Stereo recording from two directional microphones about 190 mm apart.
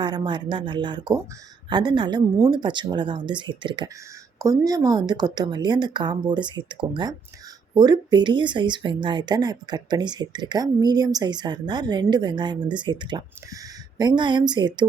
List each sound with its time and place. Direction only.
0.0 s speech: 25° right (ahead or behind)